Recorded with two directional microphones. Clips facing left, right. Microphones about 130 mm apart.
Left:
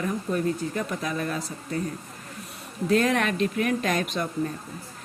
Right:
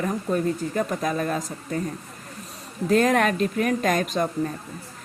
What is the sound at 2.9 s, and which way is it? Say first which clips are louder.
Speech: right 3 dB; 45° right (ahead or behind).